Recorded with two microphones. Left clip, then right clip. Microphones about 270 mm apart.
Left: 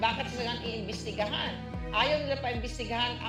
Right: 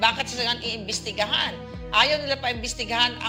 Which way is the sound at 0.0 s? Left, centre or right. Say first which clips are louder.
Right 7 dB; right.